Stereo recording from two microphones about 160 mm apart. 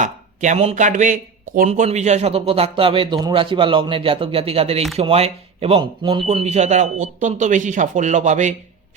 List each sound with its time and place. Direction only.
0.0 s speech: 50° right (ahead or behind); by 6.2 s 30° right (ahead or behind)
6.2 s speech: 40° right (ahead or behind)